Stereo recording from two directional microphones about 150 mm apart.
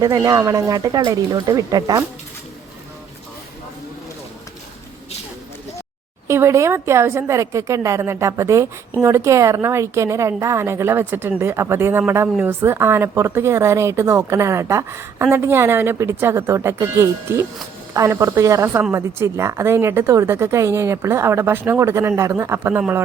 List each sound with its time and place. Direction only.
0.0 s speech: 25° right (ahead or behind)
6.2 s a woman's voice: 20° right (ahead or behind)